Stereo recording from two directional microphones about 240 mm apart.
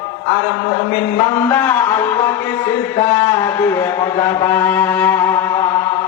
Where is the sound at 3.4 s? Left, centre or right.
Centre.